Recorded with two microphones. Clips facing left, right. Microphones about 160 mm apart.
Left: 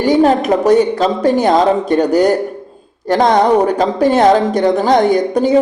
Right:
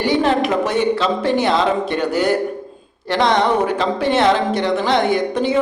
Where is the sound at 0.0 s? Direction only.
45° left (ahead or behind).